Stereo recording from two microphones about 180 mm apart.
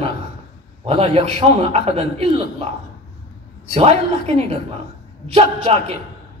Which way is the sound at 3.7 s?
35° right (ahead or behind).